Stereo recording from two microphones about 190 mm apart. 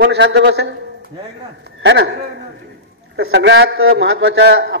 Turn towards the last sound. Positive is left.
turn(degrees=-70)  # may be behind; listen again after turning